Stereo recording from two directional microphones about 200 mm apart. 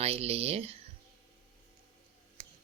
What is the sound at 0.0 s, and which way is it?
Speech, 30° right (ahead or behind).